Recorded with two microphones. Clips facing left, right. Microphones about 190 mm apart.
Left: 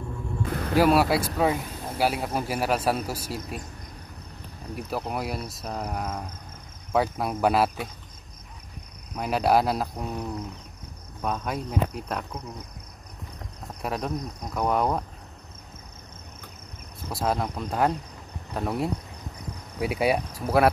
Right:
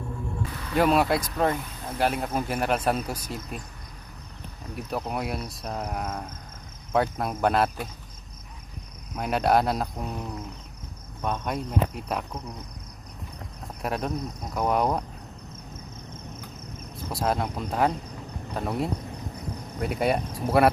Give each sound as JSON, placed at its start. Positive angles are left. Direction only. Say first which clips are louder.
{"t": 0.5, "sound": "basketball bounce", "louder": "left 8 dB", "side_deg": 50}
{"t": 0.7, "sound": "speech", "louder": "left 1 dB", "side_deg": 5}
{"t": 4.7, "sound": "speech", "louder": "even", "side_deg": 5}
{"t": 9.1, "sound": "speech", "louder": "even", "side_deg": 0}
{"t": 13.8, "sound": "speech", "louder": "right 1 dB", "side_deg": 0}
{"t": 17.1, "sound": "speech", "louder": "even", "side_deg": 0}